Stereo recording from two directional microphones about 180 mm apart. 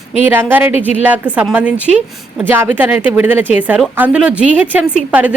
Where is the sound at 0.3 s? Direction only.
10° right (ahead or behind).